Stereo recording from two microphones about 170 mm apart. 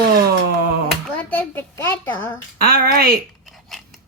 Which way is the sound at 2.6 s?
60° right (ahead or behind).